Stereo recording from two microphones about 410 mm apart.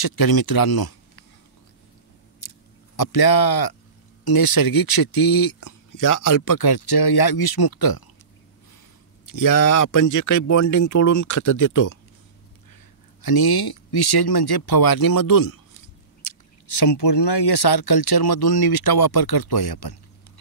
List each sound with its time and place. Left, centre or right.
0.0 s speech: left
2.4 s a sound: left
3.0 s speech: left
9.3 s speech: left
13.2 s speech: left